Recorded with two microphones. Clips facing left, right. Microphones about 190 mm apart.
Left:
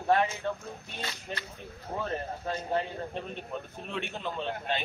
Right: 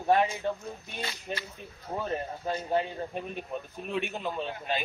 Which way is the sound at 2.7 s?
10° right (ahead or behind).